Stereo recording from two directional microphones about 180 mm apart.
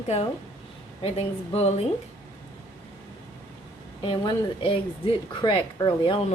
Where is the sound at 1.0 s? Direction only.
35° left (ahead or behind).